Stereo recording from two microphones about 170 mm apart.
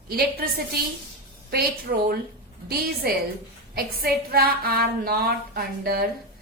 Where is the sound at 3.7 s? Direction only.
65° right (ahead or behind).